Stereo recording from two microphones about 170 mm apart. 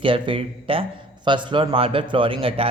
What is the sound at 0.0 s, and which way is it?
A man's voice, 30° right (ahead or behind).